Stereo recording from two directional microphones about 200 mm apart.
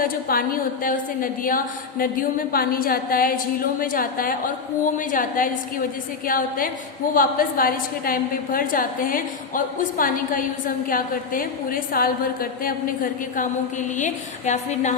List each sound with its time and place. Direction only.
0.0 s a woman's voice: 45° left (ahead or behind)